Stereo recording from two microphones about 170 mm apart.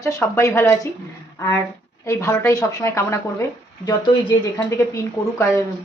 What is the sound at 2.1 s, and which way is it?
A woman's voice, 20° left (ahead or behind).